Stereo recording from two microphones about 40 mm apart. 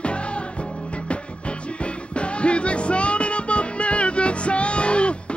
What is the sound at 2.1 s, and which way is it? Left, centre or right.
Music, left.